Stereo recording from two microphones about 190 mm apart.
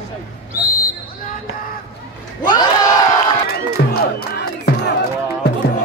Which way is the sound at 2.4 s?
20° left (ahead or behind).